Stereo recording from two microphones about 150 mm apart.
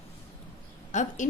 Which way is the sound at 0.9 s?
55° left (ahead or behind).